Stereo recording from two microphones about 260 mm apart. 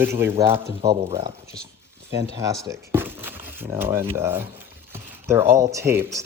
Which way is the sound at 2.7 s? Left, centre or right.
Centre.